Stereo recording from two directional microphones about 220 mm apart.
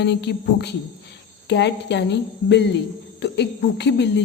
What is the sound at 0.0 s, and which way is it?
A woman's voice, 50° left (ahead or behind).